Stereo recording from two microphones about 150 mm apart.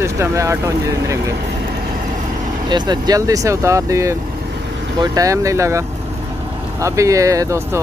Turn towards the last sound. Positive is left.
turn(degrees=-20)  # may be behind; listen again after turning